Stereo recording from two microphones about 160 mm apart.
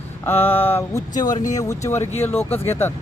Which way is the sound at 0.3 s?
15° left (ahead or behind).